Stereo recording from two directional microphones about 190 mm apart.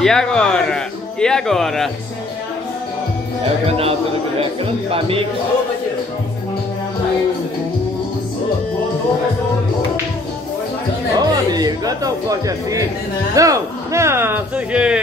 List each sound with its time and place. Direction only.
0.0 s speech: 5° left (ahead or behind)
3.6 s a man's voice: 30° right (ahead or behind)
4.9 s speech: 30° right (ahead or behind)
11.1 s speech: 20° right (ahead or behind)